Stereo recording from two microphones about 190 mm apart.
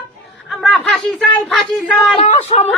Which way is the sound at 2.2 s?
30° left (ahead or behind).